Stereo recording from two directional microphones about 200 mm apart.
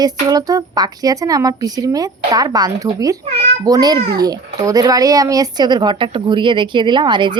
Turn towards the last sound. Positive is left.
turn(degrees=-20)  # may be behind; listen again after turning